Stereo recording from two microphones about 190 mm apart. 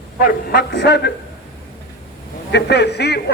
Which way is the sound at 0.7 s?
65° left (ahead or behind).